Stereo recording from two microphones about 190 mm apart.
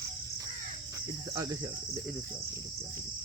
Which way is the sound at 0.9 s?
15° right (ahead or behind).